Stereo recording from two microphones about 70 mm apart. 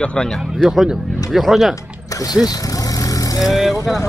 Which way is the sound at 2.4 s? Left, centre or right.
Left.